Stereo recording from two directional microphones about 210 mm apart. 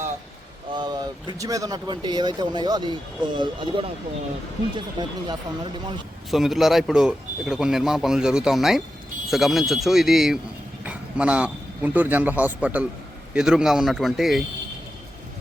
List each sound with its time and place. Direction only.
0.7 s speech: 20° right (ahead or behind)
4.9 s speech: 20° right (ahead or behind)
6.3 s a man's voice: centre (ahead or behind)